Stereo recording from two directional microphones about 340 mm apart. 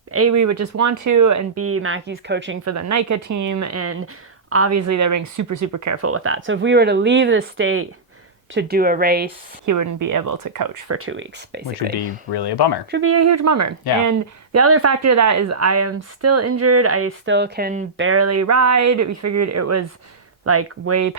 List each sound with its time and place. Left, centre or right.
0.1 s a woman's voice: right
2.6 s a woman's voice: right
9.6 s speech: right
10.8 s a woman's voice: right
18.0 s a woman's voice: right